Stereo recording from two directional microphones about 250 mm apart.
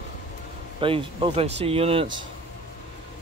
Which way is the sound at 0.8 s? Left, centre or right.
Right.